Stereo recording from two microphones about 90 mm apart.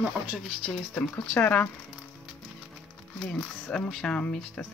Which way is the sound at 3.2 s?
10° left (ahead or behind).